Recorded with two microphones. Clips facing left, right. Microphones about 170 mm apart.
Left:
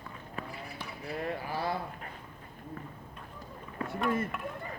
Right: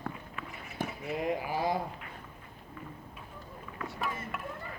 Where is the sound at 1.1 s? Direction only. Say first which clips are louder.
Right 3 dB; 15° right (ahead or behind).